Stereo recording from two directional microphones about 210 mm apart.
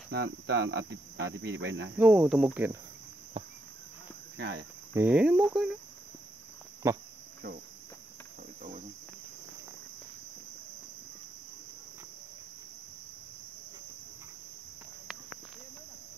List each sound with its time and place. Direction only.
0.1 s cricket: 55° right (ahead or behind)
2.0 s speech: 5° right (ahead or behind)
3.4 s a sound: 25° right (ahead or behind)
4.4 s speech: 55° right (ahead or behind)
4.9 s speech: 10° right (ahead or behind)
6.8 s speech: 15° right (ahead or behind)